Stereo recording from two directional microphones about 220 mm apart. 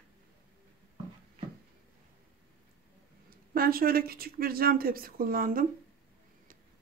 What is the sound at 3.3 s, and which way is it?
Speech, 40° right (ahead or behind).